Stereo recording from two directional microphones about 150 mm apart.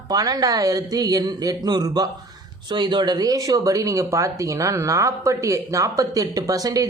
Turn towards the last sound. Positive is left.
turn(degrees=-25)  # may be behind; listen again after turning